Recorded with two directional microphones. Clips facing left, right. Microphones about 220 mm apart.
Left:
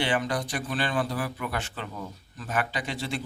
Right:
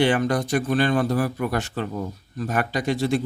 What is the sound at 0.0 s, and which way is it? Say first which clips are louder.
Speech: right 7 dB; 45° right (ahead or behind).